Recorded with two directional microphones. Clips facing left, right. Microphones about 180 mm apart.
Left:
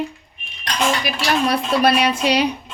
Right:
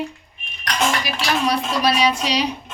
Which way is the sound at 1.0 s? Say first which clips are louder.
Left 2 dB; 55° left (ahead or behind).